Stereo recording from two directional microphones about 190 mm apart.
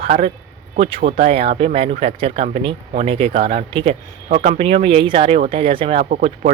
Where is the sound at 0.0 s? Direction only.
30° right (ahead or behind).